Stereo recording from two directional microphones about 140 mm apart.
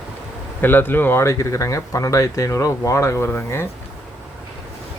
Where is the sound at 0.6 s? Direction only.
15° left (ahead or behind).